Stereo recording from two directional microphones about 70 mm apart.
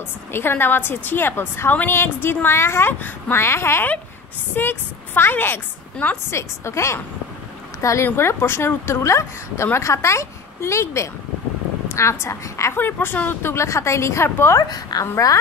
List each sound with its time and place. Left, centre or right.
0.3 s a woman's voice: left
6.3 s a woman's voice: left
12.7 s a woman's voice: left
14.7 s a woman's voice: left